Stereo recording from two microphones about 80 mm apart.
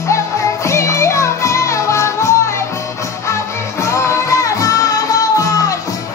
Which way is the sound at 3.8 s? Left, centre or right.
Left.